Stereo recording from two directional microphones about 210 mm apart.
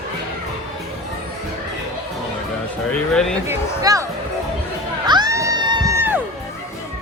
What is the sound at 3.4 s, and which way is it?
Speech, 15° right (ahead or behind).